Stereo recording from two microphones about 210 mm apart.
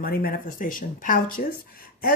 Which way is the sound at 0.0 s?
45° left (ahead or behind).